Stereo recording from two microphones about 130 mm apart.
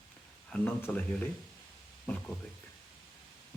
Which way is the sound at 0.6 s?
15° left (ahead or behind).